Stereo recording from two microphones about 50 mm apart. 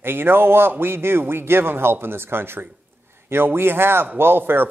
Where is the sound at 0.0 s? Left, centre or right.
Right.